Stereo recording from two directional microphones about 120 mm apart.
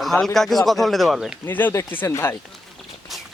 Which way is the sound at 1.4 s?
15° left (ahead or behind).